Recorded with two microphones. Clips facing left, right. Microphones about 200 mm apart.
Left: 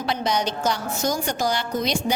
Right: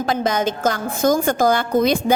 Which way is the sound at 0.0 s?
50° right (ahead or behind).